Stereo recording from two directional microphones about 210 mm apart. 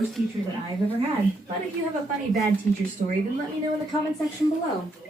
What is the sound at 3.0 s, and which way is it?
Speech, 35° right (ahead or behind).